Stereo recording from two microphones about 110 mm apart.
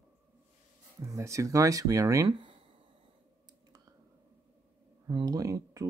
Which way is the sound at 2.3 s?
50° right (ahead or behind).